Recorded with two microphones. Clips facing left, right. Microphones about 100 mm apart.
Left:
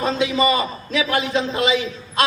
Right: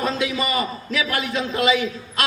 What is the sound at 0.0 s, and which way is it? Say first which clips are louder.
A man's voice: left 4 dB; 25° left (ahead or behind).